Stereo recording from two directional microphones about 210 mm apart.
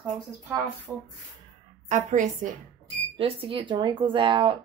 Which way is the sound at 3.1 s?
25° right (ahead or behind).